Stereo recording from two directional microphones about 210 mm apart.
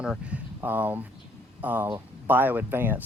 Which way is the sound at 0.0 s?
5° right (ahead or behind).